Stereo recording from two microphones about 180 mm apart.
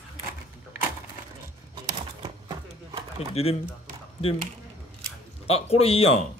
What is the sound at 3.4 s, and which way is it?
Speech, 35° left (ahead or behind).